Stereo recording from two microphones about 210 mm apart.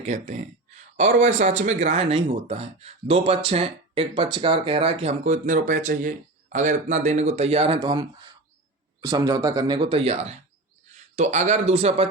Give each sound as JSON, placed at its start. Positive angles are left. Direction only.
{"t": 0.0, "sound": "speech", "side_deg": -35}